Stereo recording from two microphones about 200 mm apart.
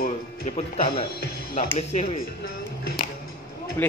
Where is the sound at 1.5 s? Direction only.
30° left (ahead or behind).